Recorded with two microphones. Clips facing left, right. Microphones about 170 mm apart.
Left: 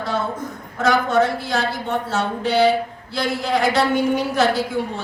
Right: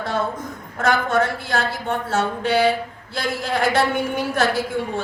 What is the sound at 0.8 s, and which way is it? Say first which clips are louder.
A woman's voice: left 2 dB; 50° right (ahead or behind).